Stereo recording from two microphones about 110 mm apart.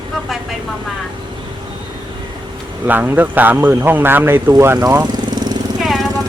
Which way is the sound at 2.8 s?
15° right (ahead or behind).